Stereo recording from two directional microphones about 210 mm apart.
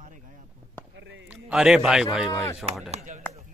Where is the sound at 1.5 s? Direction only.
5° right (ahead or behind).